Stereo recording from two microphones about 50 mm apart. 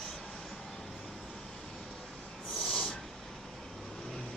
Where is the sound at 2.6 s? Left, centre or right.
Left.